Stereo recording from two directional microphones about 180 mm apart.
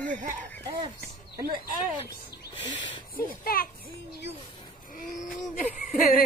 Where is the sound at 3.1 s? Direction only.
55° left (ahead or behind).